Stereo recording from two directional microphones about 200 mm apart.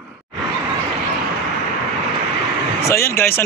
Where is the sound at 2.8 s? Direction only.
15° left (ahead or behind).